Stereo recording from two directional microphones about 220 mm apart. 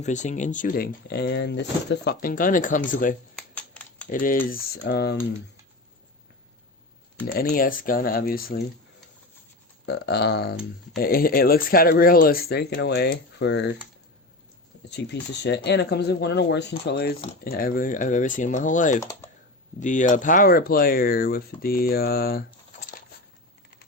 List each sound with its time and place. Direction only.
0.0 s speech: 35° left (ahead or behind)
3.3 s typing: 5° left (ahead or behind)
4.1 s speech: 40° left (ahead or behind)
7.3 s speech: 40° left (ahead or behind)
9.8 s speech: 50° left (ahead or behind)
14.8 s speech: 50° left (ahead or behind)